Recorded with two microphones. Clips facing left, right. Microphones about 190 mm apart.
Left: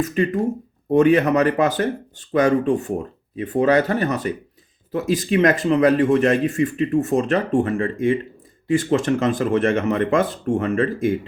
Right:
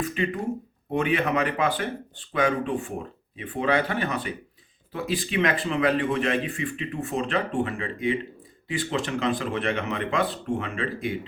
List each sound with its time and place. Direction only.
0.0 s a man's voice: 45° left (ahead or behind)